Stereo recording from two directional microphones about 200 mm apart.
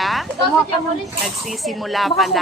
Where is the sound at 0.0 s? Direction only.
Centre (ahead or behind).